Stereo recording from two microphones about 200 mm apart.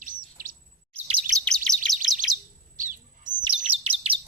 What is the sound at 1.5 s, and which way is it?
Chirp, 5° left (ahead or behind).